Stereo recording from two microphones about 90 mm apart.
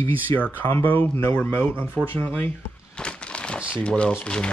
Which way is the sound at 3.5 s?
10° right (ahead or behind).